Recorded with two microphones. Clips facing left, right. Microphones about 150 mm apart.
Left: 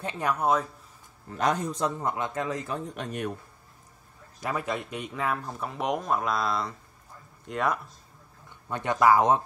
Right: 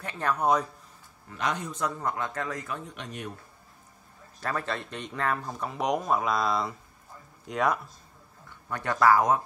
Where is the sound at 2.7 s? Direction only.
40° left (ahead or behind).